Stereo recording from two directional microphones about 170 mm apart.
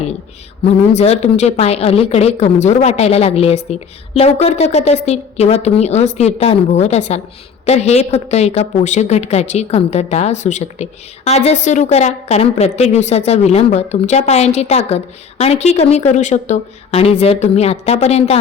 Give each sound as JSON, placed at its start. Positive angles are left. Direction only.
{"t": 0.9, "sound": "a woman's voice", "side_deg": 40}